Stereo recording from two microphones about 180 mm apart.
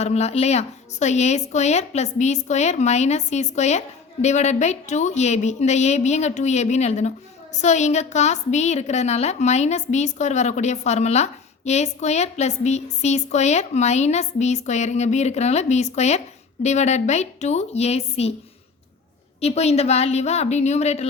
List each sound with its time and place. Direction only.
0.0 s a woman's voice: 35° left (ahead or behind)
19.4 s a woman's voice: 35° left (ahead or behind)